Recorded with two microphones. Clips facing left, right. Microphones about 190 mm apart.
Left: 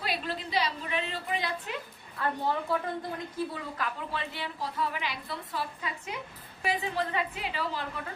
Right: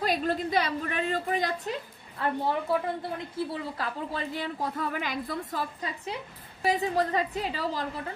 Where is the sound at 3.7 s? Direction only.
35° right (ahead or behind).